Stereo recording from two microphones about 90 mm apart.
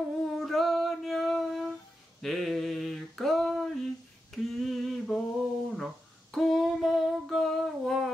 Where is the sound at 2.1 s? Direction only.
Centre (ahead or behind).